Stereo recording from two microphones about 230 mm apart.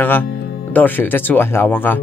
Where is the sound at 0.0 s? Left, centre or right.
Centre.